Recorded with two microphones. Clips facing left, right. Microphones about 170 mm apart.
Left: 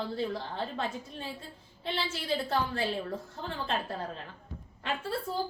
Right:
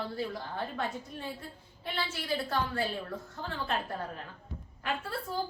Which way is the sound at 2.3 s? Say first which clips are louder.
Left 1 dB; 25° left (ahead or behind).